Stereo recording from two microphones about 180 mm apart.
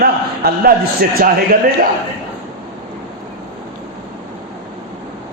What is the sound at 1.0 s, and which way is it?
Speech, 55° right (ahead or behind).